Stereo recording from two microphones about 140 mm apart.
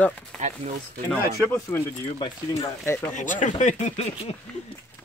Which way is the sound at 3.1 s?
65° left (ahead or behind).